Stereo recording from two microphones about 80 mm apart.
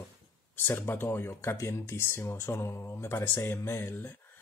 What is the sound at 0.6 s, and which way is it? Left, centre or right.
Speech, left.